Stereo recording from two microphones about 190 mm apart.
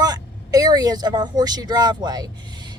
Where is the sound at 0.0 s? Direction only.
20° right (ahead or behind).